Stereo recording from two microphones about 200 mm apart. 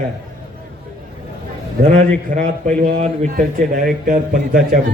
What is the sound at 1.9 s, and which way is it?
A man's voice, 40° right (ahead or behind).